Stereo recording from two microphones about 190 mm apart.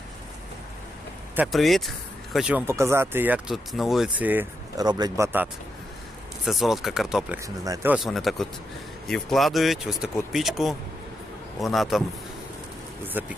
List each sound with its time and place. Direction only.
1.4 s speech: centre (ahead or behind)
4.8 s speech: 20° right (ahead or behind)
6.4 s speech: centre (ahead or behind)
7.4 s speech: 15° right (ahead or behind); by 12.0 s centre (ahead or behind)
13.2 s speech: 10° right (ahead or behind)